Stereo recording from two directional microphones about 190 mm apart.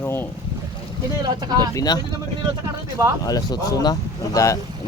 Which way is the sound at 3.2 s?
20° left (ahead or behind).